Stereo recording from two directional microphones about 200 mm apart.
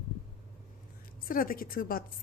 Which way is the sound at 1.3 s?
45° left (ahead or behind).